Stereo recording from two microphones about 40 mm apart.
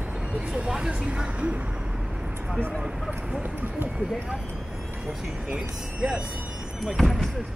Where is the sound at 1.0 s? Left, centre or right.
Right.